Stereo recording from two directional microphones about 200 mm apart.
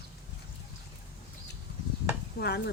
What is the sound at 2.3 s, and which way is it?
Speech, 55° left (ahead or behind).